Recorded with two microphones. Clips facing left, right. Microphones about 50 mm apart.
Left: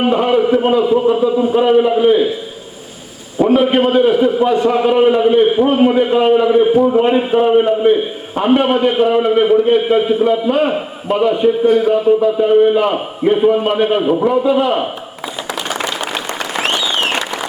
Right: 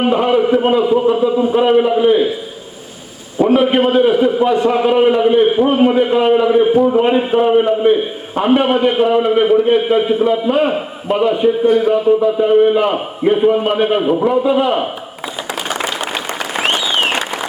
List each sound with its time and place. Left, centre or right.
0.0 s a man's voice: centre
3.3 s a man's voice: centre
15.2 s a sound: right
16.4 s applause: centre